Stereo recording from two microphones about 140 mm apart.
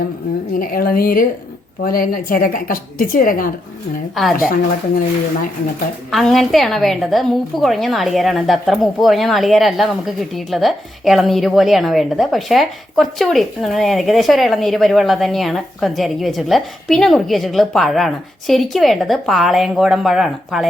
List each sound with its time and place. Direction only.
0.6 s a woman's voice: 90° left
4.1 s a woman's voice: centre (ahead or behind)
6.1 s a woman's voice: centre (ahead or behind)